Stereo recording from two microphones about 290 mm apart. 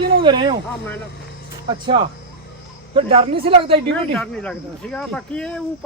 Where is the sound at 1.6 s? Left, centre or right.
Centre.